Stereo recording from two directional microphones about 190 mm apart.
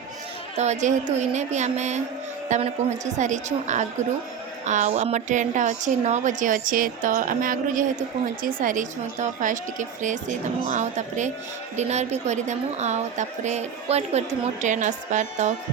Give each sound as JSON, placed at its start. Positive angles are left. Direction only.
{"t": 0.5, "sound": "a woman's voice", "side_deg": -35}